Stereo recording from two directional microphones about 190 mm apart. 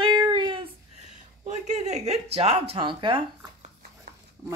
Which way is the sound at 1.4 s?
35° right (ahead or behind).